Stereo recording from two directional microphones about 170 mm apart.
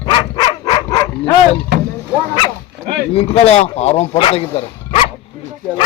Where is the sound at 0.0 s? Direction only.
25° left (ahead or behind).